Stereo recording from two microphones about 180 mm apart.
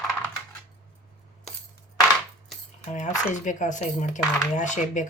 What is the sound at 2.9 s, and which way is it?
Speech, 40° left (ahead or behind).